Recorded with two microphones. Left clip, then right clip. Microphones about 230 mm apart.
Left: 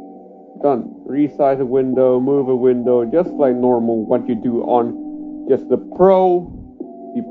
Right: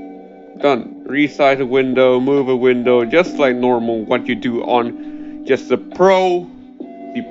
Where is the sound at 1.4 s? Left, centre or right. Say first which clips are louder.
Right 2 dB; centre.